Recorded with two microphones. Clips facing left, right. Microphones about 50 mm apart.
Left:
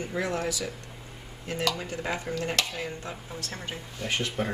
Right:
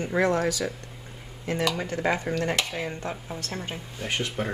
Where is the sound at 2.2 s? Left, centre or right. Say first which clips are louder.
Right 4 dB; right.